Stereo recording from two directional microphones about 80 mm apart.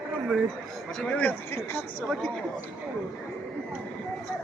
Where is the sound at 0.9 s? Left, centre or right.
Centre; by 2.0 s left.